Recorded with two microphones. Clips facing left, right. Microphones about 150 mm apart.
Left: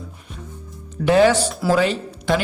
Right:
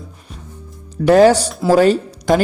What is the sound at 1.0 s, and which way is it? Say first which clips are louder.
Speech: right 5 dB; 40° right (ahead or behind).